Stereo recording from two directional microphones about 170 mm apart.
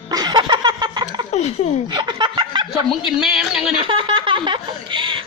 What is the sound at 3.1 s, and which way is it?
Speech, 5° right (ahead or behind).